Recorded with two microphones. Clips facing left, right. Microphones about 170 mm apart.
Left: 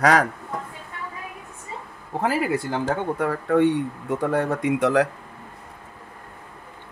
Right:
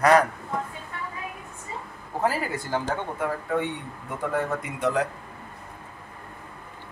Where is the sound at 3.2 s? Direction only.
85° left.